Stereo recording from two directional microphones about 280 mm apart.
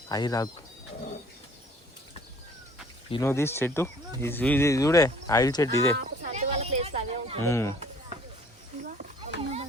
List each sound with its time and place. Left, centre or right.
0.1 s speech: centre
3.1 s speech: centre
6.0 s a sound: right
7.4 s speech: centre
8.8 s children playing: right